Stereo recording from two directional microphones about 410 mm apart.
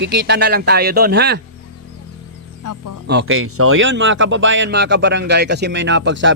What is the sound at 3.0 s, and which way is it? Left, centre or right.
Speech, right.